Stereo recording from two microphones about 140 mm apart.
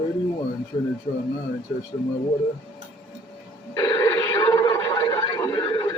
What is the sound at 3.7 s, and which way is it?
Speech, 25° left (ahead or behind).